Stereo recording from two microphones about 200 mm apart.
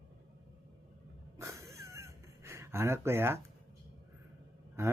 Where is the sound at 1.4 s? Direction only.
15° right (ahead or behind).